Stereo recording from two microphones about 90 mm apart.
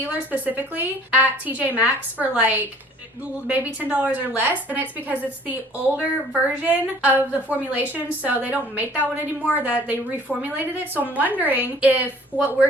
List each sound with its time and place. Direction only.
0.0 s a woman's voice: 20° right (ahead or behind)
10.5 s a woman's voice: 20° right (ahead or behind)